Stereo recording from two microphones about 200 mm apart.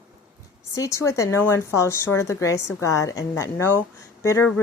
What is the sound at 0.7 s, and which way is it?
A woman's voice, 15° left (ahead or behind).